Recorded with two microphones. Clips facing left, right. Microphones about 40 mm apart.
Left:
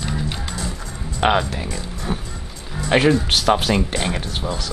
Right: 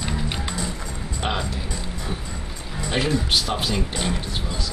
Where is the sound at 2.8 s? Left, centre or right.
Left.